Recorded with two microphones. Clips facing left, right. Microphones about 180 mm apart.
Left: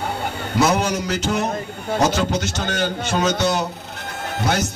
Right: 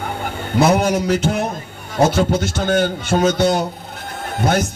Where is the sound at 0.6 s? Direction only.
55° right (ahead or behind).